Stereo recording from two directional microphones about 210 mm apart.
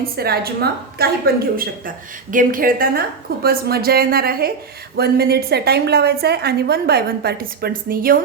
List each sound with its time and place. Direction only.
0.2 s a woman's voice: 50° right (ahead or behind)